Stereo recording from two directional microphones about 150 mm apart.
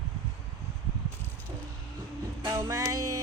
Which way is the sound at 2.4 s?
25° right (ahead or behind).